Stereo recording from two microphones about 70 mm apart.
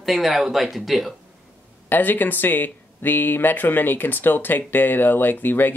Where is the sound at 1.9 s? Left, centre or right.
Left.